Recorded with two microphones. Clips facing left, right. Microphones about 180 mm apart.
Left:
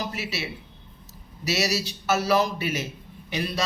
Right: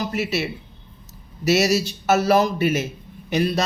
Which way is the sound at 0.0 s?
50° right (ahead or behind).